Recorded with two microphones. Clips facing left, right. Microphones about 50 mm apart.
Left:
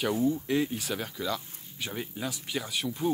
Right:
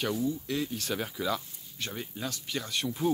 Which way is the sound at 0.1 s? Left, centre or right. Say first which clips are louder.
Left 4 dB; left.